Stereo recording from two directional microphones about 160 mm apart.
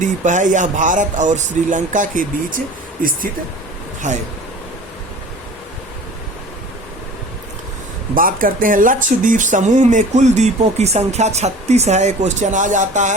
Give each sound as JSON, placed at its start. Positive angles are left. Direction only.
{"t": 0.0, "sound": "speech", "side_deg": -50}
{"t": 4.0, "sound": "speech", "side_deg": -50}
{"t": 8.1, "sound": "speech", "side_deg": -60}